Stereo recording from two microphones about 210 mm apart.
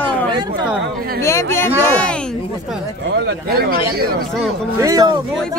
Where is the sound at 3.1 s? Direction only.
50° right (ahead or behind).